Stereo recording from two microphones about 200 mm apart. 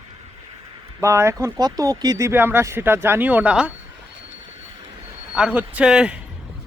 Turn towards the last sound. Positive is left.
turn(degrees=-5)  # may be behind; listen again after turning